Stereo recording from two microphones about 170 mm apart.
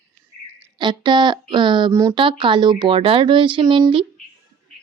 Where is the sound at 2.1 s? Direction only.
30° right (ahead or behind).